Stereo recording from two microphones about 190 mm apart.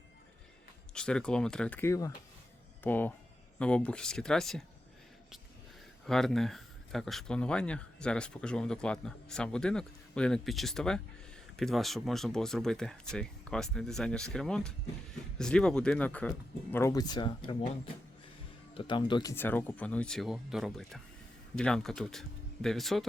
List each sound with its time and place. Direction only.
0.9 s speech: 5° left (ahead or behind)
6.1 s speech: centre (ahead or behind); by 17.7 s 25° left (ahead or behind)
18.7 s speech: 25° left (ahead or behind)
19.3 s speech: 10° left (ahead or behind)